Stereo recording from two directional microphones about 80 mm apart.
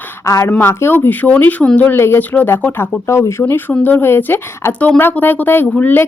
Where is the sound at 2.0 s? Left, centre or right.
Left.